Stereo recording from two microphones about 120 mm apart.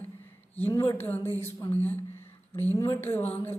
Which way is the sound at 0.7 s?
30° left (ahead or behind).